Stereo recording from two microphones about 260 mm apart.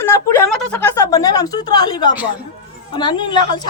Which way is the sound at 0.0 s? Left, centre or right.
Centre.